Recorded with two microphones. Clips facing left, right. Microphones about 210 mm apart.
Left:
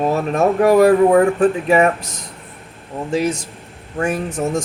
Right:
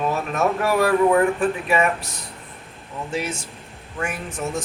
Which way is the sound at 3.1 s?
40° left (ahead or behind).